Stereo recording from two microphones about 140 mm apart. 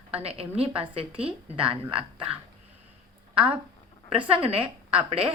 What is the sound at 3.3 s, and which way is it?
A woman's voice, 40° right (ahead or behind).